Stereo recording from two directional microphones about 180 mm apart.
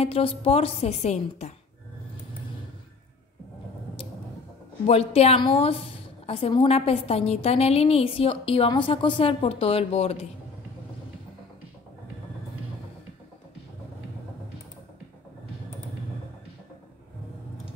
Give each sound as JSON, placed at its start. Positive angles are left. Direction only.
{"t": 0.0, "sound": "a woman's voice", "side_deg": 30}
{"t": 4.8, "sound": "a woman's voice", "side_deg": 35}